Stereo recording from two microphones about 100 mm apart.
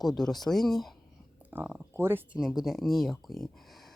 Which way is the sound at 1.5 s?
20° right (ahead or behind).